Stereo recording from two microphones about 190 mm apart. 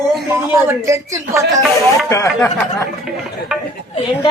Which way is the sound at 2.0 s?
15° left (ahead or behind).